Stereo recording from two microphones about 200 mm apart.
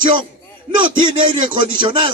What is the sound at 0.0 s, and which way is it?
Speech, 25° right (ahead or behind).